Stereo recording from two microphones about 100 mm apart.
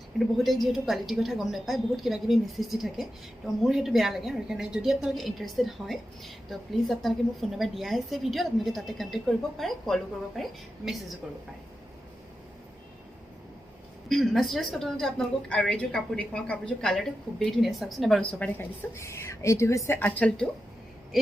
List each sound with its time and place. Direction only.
0.3 s a woman's voice: centre (ahead or behind)
14.1 s a woman's voice: centre (ahead or behind)
18.2 s a woman's voice: 15° left (ahead or behind)
18.9 s speech: 30° left (ahead or behind)
20.0 s a woman's voice: 15° left (ahead or behind)